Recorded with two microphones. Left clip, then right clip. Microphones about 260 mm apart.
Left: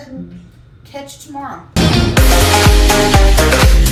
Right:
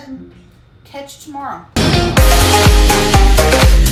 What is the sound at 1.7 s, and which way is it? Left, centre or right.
Music, centre.